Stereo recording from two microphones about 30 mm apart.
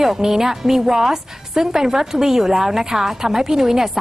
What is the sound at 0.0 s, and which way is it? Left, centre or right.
A woman's voice, centre.